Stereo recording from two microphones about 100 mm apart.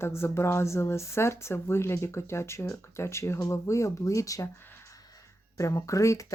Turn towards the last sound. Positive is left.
turn(degrees=35)  # may be behind; listen again after turning